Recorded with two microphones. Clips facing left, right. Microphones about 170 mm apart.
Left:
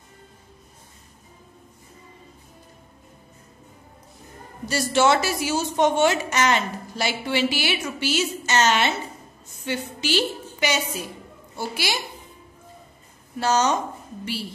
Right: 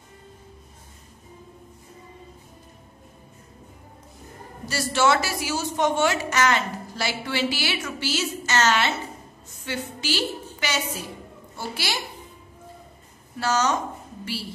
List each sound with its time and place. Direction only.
4.6 s a woman's voice: 20° left (ahead or behind)
13.4 s a woman's voice: 20° left (ahead or behind)